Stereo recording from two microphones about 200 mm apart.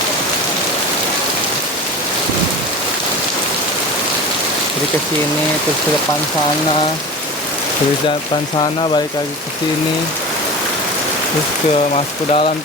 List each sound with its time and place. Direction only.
11.9 s speech: 30° left (ahead or behind)